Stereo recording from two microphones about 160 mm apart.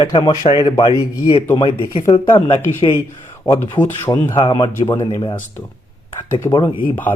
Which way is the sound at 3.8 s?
15° left (ahead or behind).